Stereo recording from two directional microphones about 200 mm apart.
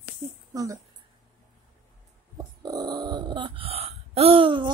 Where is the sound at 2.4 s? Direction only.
20° right (ahead or behind).